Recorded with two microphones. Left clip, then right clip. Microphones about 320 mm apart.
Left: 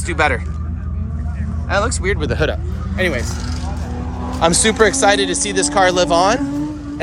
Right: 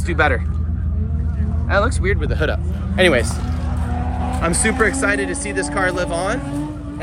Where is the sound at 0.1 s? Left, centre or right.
Centre.